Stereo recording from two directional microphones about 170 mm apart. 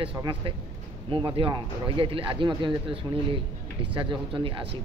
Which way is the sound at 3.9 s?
30° right (ahead or behind).